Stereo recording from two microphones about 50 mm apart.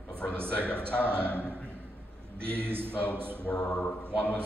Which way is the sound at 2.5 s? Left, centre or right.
Right.